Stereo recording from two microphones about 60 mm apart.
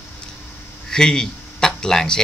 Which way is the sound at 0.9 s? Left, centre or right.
Centre.